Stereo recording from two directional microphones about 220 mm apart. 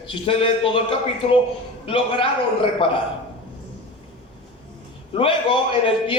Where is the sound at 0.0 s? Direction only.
25° left (ahead or behind).